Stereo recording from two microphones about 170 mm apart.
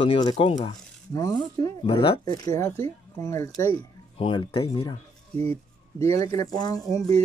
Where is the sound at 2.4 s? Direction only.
15° left (ahead or behind).